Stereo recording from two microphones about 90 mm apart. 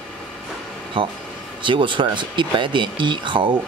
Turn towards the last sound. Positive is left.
turn(degrees=-65)  # may be behind; listen again after turning